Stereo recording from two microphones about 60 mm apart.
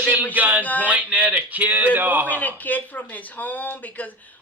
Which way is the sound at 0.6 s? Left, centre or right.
Left.